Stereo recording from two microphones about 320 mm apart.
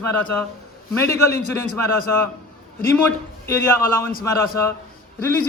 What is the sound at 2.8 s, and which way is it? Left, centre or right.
Speech, centre.